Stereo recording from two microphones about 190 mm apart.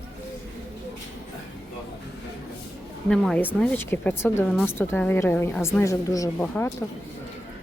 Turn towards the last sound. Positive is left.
turn(degrees=10)  # may be behind; listen again after turning